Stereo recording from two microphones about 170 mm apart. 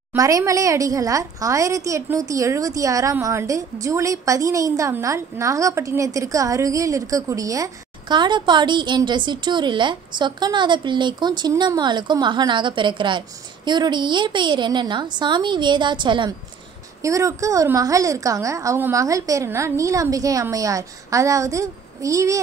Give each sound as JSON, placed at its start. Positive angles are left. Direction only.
{"t": 0.1, "sound": "a woman's voice", "side_deg": -20}